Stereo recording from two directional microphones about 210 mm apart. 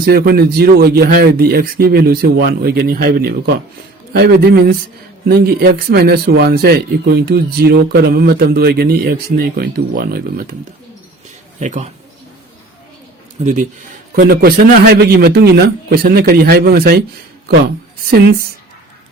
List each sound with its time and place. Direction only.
0.0 s speech: 45° right (ahead or behind)
11.6 s speech: 35° right (ahead or behind)
13.4 s speech: 35° right (ahead or behind)
14.2 s speech: 45° right (ahead or behind)